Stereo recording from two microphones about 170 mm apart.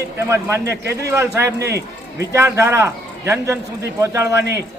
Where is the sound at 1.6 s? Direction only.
75° right (ahead or behind).